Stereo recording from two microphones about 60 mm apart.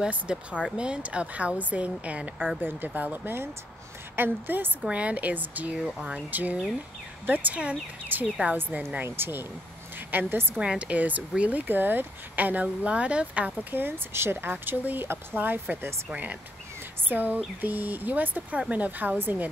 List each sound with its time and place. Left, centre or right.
0.1 s speech: centre
4.8 s speech: right
5.8 s speech: centre; by 10.6 s right
10.6 s speech: centre
13.7 s speech: right